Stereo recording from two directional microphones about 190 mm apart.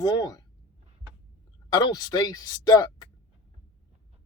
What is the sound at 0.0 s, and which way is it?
Speech, 20° left (ahead or behind).